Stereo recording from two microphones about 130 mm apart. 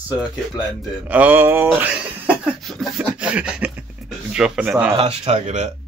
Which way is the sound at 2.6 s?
Centre (ahead or behind).